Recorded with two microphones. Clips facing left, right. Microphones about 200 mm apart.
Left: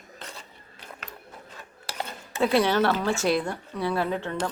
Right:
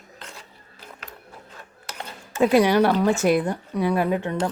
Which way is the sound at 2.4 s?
15° right (ahead or behind).